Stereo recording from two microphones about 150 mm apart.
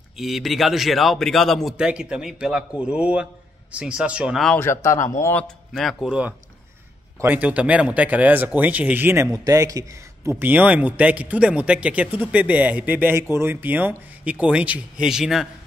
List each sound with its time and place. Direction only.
0.2 s speech: centre (ahead or behind)
4.6 s a man's voice: 20° left (ahead or behind); by 15.4 s 5° right (ahead or behind)